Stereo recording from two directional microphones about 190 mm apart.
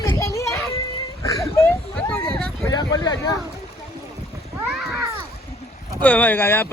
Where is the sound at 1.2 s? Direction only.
15° left (ahead or behind).